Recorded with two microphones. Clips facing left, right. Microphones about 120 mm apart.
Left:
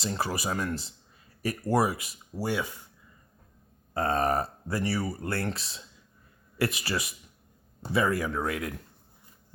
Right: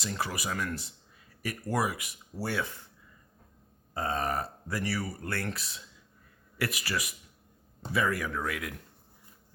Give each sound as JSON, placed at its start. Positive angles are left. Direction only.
{"t": 0.0, "sound": "speech", "side_deg": 30}
{"t": 2.3, "sound": "speech", "side_deg": 15}
{"t": 3.9, "sound": "burping", "side_deg": 55}
{"t": 4.3, "sound": "speech", "side_deg": 30}